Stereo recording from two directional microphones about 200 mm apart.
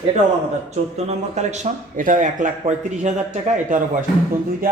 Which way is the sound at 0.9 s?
35° right (ahead or behind).